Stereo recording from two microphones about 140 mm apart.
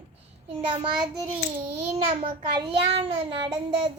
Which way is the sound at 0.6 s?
35° right (ahead or behind).